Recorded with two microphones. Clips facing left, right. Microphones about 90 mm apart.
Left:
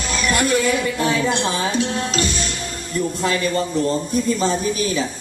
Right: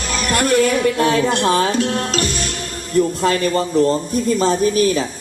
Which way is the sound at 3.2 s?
45° right (ahead or behind).